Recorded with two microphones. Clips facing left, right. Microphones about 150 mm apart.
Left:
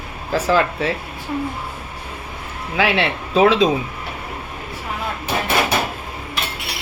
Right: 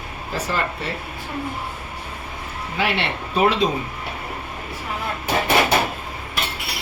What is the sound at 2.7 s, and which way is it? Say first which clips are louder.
Speech: left 5 dB; 90° left.